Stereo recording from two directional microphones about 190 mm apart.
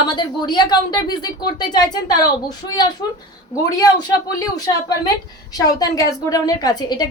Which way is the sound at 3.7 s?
20° left (ahead or behind).